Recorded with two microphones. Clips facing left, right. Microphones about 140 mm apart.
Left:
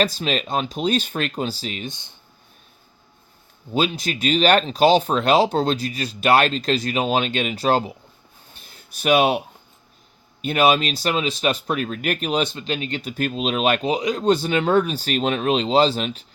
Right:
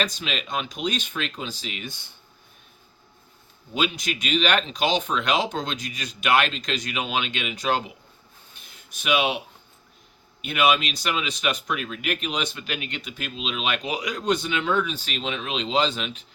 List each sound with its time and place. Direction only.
0.0 s speech: 35° left (ahead or behind)
3.8 s speech: 35° left (ahead or behind)
8.5 s a sound: 35° left (ahead or behind)
10.4 s speech: 35° left (ahead or behind)
13.1 s speech: 45° left (ahead or behind)